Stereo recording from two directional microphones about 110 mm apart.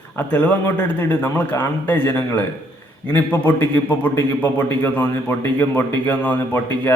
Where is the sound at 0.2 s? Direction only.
15° left (ahead or behind).